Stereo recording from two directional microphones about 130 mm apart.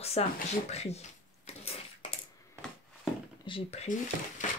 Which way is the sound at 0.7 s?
55° left (ahead or behind).